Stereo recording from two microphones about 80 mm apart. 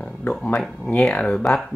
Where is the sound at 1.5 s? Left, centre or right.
Centre.